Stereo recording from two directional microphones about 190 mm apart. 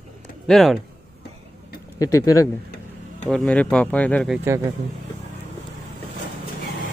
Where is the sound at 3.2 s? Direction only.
Centre (ahead or behind).